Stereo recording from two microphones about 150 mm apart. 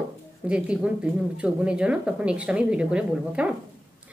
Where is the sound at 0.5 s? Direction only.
5° right (ahead or behind).